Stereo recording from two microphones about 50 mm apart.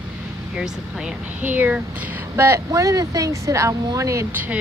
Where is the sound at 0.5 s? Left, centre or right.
Centre.